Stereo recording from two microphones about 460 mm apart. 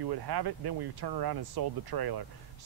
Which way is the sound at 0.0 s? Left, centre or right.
Right.